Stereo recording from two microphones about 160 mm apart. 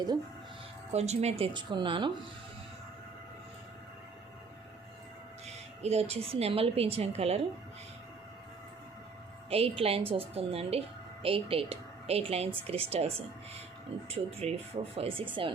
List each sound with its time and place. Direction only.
0.9 s speech: 45° right (ahead or behind)
1.5 s speech: 30° right (ahead or behind)
5.8 s a woman's voice: 40° right (ahead or behind)
9.5 s a woman's voice: 40° right (ahead or behind)
14.1 s a woman's voice: 40° right (ahead or behind)